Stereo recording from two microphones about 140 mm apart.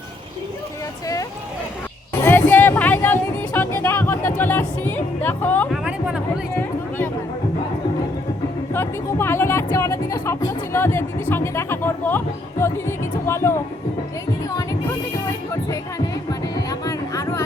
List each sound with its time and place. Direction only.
2.2 s music: 15° left (ahead or behind)
5.7 s music: 5° right (ahead or behind)
6.6 s a sound: 15° left (ahead or behind)
8.7 s speech: 15° left (ahead or behind)
16.6 s music: 25° left (ahead or behind)